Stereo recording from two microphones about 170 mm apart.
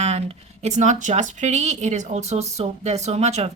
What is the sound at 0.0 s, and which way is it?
A woman's voice, 40° right (ahead or behind).